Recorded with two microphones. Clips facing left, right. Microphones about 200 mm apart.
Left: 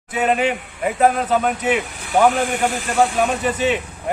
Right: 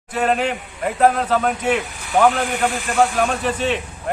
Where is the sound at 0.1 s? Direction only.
5° left (ahead or behind).